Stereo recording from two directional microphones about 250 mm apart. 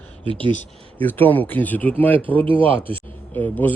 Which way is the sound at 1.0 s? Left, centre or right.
Centre.